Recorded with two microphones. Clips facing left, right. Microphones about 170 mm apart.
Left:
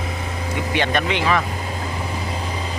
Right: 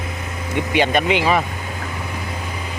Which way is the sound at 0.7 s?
10° right (ahead or behind).